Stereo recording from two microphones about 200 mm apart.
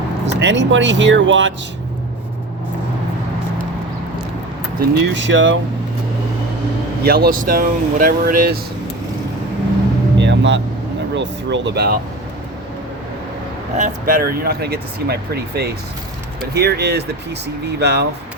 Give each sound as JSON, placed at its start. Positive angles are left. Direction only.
{"t": 0.3, "sound": "speech", "side_deg": -65}
{"t": 4.8, "sound": "speech", "side_deg": -55}
{"t": 7.0, "sound": "speech", "side_deg": -50}
{"t": 10.2, "sound": "music", "side_deg": -60}
{"t": 11.1, "sound": "speech", "side_deg": -60}
{"t": 13.7, "sound": "speech", "side_deg": -45}